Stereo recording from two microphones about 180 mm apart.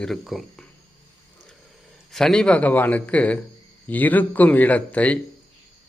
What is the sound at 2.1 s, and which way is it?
A man's voice, 5° left (ahead or behind).